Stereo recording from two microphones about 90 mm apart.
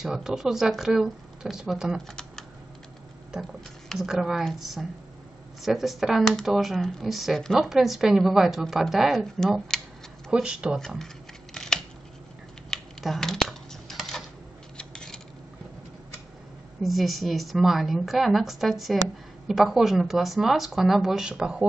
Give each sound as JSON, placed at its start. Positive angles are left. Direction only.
{"t": 0.0, "sound": "speech", "side_deg": -5}
{"t": 3.9, "sound": "speech", "side_deg": -5}
{"t": 10.3, "sound": "speech", "side_deg": -10}
{"t": 10.8, "sound": "speech", "side_deg": 5}
{"t": 11.5, "sound": "scissors", "side_deg": 5}
{"t": 12.6, "sound": "a sound", "side_deg": 5}
{"t": 16.8, "sound": "speech", "side_deg": 0}